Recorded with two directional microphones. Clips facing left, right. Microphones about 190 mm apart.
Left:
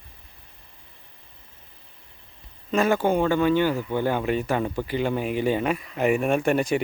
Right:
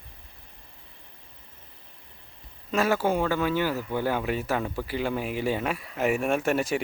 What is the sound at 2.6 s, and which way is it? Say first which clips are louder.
Speech: left 3 dB; centre (ahead or behind).